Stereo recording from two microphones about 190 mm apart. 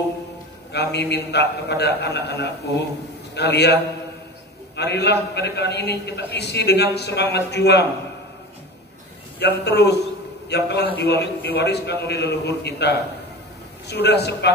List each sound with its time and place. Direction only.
0.7 s a man's voice: 60° left (ahead or behind)
9.4 s a man's voice: 60° left (ahead or behind)